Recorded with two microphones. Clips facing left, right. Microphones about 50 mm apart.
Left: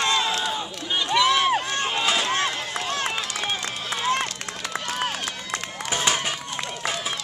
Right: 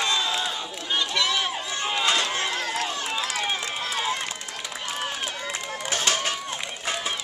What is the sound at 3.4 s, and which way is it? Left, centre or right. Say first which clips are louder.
Run: right 1 dB; centre.